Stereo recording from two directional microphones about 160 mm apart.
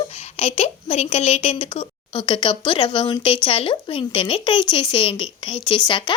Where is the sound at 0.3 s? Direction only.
40° left (ahead or behind).